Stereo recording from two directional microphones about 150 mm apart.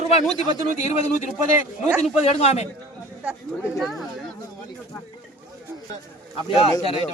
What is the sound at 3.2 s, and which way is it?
Speech, 5° right (ahead or behind).